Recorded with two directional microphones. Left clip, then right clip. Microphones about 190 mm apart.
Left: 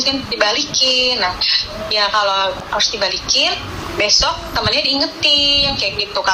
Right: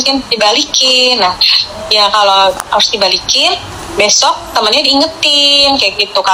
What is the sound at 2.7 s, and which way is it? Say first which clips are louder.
Speech: right 5 dB; 45° right (ahead or behind).